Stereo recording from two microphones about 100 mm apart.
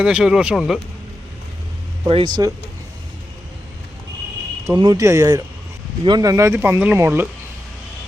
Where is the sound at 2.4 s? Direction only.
40° right (ahead or behind).